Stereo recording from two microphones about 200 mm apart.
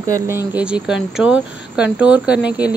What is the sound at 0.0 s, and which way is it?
Speech, 15° right (ahead or behind).